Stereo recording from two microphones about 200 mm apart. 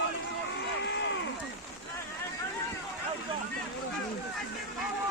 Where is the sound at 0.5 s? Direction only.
60° left (ahead or behind).